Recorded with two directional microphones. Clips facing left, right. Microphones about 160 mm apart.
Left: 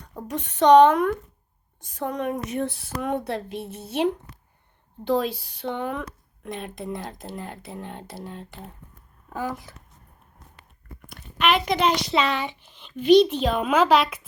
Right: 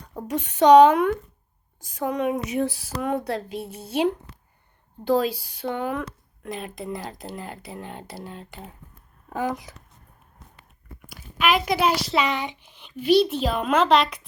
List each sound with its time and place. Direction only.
0.3 s speech: 5° right (ahead or behind)
9.3 s speech: 20° right (ahead or behind)
11.0 s speech: 5° right (ahead or behind)